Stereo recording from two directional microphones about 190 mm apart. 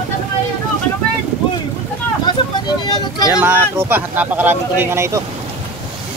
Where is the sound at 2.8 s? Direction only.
20° left (ahead or behind).